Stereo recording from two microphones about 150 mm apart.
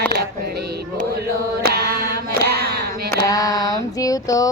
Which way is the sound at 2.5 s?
90° right.